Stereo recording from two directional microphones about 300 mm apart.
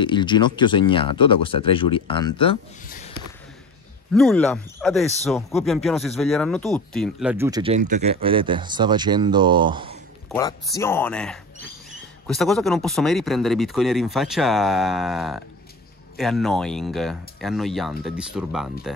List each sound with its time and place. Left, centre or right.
0.0 s speech: centre
4.1 s speech: centre
10.3 s speech: centre